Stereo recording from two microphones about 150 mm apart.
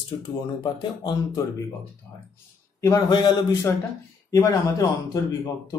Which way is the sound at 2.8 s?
25° left (ahead or behind).